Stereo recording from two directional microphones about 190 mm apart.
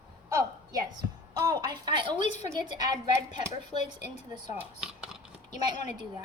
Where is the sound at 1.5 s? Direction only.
20° right (ahead or behind).